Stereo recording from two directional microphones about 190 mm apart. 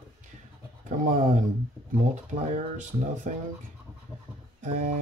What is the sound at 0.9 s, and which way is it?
Speech, 40° right (ahead or behind).